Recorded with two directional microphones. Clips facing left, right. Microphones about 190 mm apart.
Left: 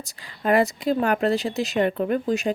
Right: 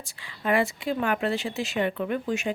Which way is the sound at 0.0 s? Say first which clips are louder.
Left 4 dB; 40° left (ahead or behind).